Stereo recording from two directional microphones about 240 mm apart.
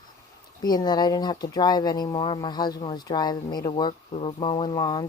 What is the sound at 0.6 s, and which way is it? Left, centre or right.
Speech, centre.